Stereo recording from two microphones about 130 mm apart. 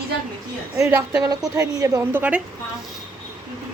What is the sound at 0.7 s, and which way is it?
A woman's voice, 20° right (ahead or behind).